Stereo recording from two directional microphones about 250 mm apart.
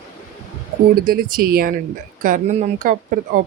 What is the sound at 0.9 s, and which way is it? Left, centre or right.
Speech, right.